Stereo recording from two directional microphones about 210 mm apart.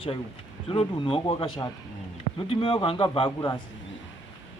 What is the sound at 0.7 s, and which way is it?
Speech, 25° left (ahead or behind).